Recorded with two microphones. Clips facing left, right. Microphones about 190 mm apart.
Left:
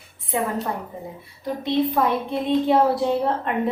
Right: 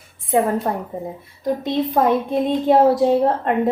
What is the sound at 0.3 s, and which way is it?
A woman's voice, 45° right (ahead or behind).